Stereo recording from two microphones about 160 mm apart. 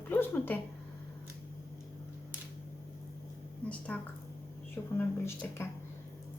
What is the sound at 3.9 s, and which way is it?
A woman's voice, 5° left (ahead or behind).